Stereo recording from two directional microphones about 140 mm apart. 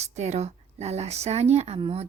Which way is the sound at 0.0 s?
55° right (ahead or behind).